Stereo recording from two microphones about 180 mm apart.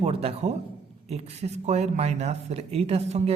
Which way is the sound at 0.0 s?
35° right (ahead or behind).